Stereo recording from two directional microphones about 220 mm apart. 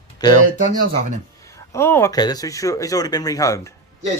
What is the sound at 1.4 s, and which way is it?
Speech, 15° left (ahead or behind).